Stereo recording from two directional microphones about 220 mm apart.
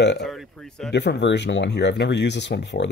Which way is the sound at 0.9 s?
50° left (ahead or behind).